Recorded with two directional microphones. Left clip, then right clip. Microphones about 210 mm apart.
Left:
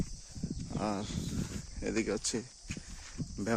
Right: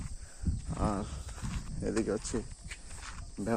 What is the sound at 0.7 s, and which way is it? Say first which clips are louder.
Speech: right 1 dB; 35° left (ahead or behind).